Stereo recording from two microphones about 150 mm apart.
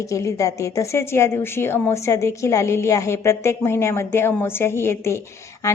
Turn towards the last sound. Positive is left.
turn(degrees=20)  # may be behind; listen again after turning